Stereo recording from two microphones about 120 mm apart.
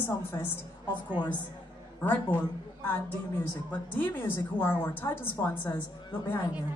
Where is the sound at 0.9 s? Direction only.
40° left (ahead or behind).